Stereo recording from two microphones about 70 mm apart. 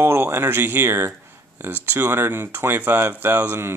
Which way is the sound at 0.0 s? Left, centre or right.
Right.